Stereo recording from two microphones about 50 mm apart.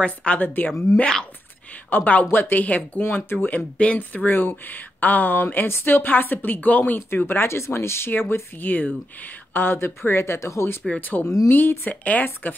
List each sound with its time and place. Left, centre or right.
0.0 s a woman's voice: left
0.4 s speech: left
0.9 s speech: left
1.9 s speech: left
2.6 s speech: left
3.5 s speech: left
8.1 s speech: left
10.1 s speech: left
11.0 s speech: left
11.8 s speech: left